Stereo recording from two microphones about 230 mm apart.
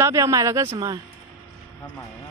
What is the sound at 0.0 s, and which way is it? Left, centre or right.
Speech, centre.